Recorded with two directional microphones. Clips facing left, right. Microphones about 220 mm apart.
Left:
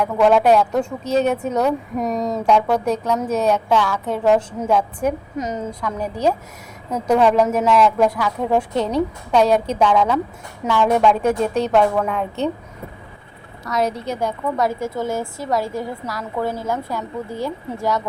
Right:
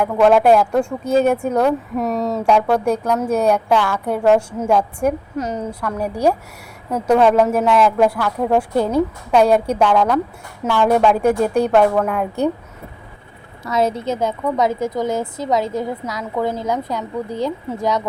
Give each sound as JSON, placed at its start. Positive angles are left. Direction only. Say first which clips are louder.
{"t": 0.0, "sound": "speech", "louder": "right 2 dB", "side_deg": -5}
{"t": 6.0, "sound": "speech", "louder": "right 3 dB", "side_deg": -10}
{"t": 13.7, "sound": "a woman's voice", "louder": "right 3 dB", "side_deg": -25}